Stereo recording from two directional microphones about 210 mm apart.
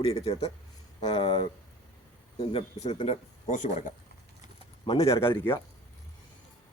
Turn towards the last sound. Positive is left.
turn(degrees=15)  # may be behind; listen again after turning